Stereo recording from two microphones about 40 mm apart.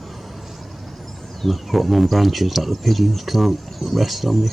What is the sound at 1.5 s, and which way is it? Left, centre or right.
Speech, centre.